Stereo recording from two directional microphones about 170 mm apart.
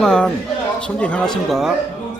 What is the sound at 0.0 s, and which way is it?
Speech, 5° left (ahead or behind).